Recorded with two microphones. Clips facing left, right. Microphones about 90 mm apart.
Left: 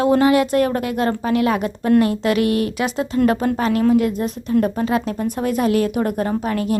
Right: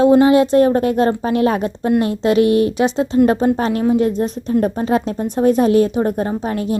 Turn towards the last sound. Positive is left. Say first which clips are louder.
# even
turn(degrees=-25)  # may be behind; listen again after turning